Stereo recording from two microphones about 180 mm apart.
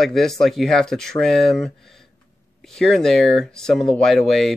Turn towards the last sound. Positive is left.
turn(degrees=0)  # may be behind; listen again after turning